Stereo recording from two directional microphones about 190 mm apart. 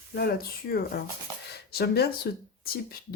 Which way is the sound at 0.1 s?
55° left (ahead or behind).